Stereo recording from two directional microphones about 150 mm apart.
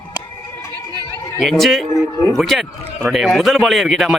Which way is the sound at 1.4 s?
Centre (ahead or behind).